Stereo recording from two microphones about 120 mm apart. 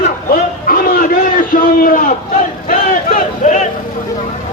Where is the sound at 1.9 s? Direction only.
90° left.